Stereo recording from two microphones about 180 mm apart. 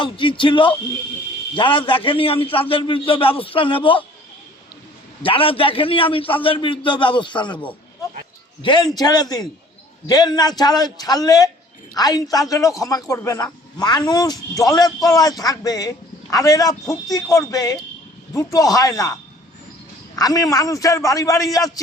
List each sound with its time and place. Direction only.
0.0 s a man's voice: 25° left (ahead or behind)
5.2 s a man's voice: 30° left (ahead or behind)
8.6 s a man's voice: 25° left (ahead or behind)